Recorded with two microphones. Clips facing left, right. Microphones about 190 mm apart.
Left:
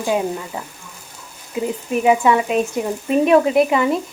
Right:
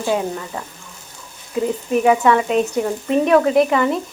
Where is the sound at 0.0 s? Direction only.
15° left (ahead or behind).